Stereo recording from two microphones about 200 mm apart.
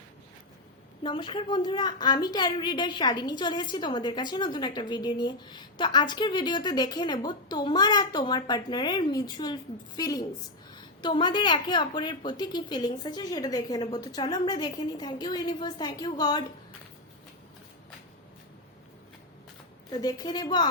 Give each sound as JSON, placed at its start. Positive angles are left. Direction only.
{"t": 1.0, "sound": "a woman's voice", "side_deg": 25}
{"t": 19.9, "sound": "a woman's voice", "side_deg": 20}